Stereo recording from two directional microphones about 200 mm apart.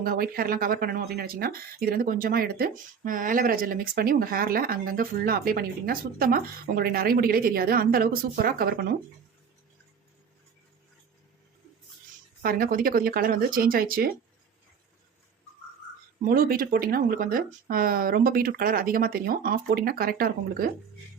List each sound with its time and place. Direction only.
0.0 s speech: 45° right (ahead or behind)
12.4 s speech: 45° right (ahead or behind)
16.2 s speech: 45° right (ahead or behind)